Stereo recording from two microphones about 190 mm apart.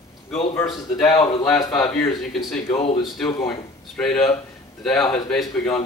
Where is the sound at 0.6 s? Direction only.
5° left (ahead or behind).